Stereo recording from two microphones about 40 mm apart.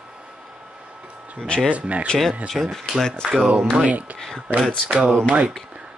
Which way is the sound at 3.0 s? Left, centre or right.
Centre.